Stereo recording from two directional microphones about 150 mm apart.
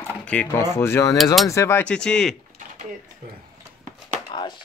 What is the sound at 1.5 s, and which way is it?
Speech, 20° left (ahead or behind).